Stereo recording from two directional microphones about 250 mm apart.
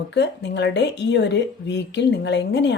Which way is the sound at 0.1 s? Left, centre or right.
Left.